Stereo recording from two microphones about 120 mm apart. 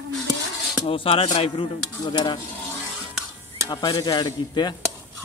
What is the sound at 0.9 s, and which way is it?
Speech, 50° left (ahead or behind).